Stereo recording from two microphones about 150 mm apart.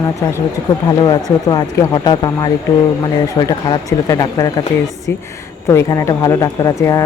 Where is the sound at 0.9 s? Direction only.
30° left (ahead or behind).